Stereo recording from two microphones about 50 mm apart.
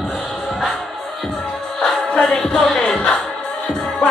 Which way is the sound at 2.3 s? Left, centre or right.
Centre.